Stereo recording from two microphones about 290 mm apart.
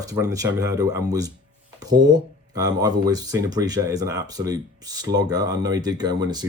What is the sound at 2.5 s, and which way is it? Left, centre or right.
Speech, centre.